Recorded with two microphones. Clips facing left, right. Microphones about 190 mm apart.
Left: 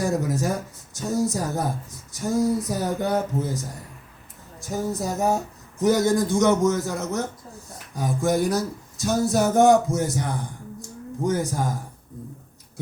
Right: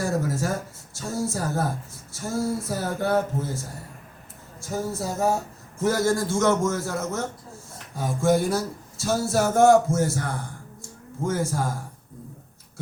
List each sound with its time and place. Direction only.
0.0 s speech: 20° left (ahead or behind)
4.6 s a man's voice: 15° left (ahead or behind)
8.2 s a man's voice: 15° left (ahead or behind)
10.8 s a sound: 20° left (ahead or behind)